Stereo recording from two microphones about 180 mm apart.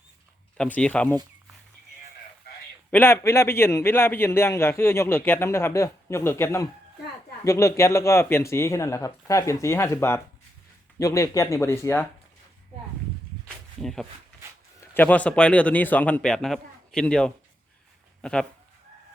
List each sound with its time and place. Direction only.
0.5 s a man's voice: 5° left (ahead or behind)
2.9 s a man's voice: 15° left (ahead or behind)
13.8 s a man's voice: centre (ahead or behind)